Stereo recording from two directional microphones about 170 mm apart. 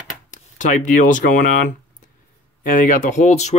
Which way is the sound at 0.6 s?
50° left (ahead or behind).